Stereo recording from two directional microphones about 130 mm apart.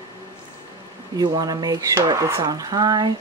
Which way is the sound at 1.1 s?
30° right (ahead or behind).